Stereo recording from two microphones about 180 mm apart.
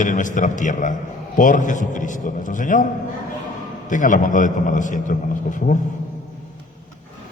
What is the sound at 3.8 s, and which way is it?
A man's voice, 45° left (ahead or behind).